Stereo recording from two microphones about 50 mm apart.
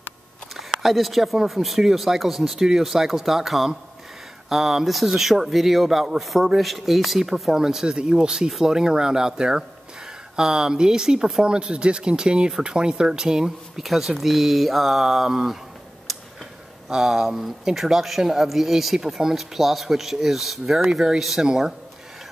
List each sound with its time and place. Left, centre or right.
0.8 s speech: centre
16.1 s tick-tock: centre
16.9 s speech: centre